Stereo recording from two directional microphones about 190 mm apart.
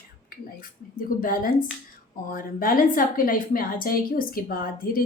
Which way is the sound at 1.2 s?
50° left (ahead or behind).